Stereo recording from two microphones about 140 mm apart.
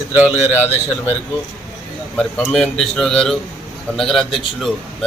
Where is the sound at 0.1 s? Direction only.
15° right (ahead or behind).